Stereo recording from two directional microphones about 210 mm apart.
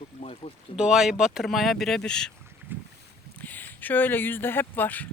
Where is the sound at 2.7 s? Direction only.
10° right (ahead or behind).